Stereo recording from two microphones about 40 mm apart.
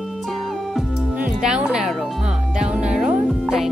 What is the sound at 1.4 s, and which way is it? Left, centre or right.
Music, centre.